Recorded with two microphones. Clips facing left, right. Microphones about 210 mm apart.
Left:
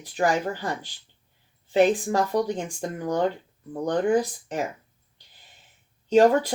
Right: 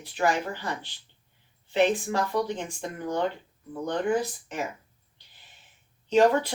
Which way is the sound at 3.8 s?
40° left (ahead or behind).